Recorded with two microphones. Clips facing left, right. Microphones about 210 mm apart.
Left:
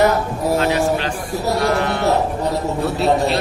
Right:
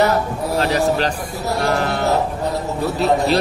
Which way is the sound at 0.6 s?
35° right (ahead or behind).